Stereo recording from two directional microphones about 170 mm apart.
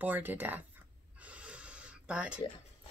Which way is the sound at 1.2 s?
5° right (ahead or behind).